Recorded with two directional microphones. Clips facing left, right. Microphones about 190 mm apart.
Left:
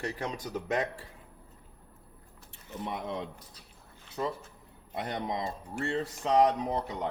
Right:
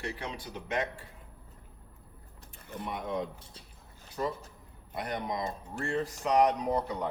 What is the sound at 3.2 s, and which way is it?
Speech, 30° right (ahead or behind).